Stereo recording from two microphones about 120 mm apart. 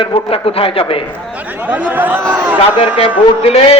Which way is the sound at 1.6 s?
15° right (ahead or behind).